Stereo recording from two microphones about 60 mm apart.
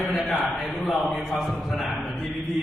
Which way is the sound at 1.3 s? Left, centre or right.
Centre.